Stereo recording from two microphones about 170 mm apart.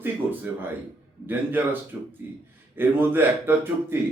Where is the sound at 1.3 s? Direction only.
10° right (ahead or behind).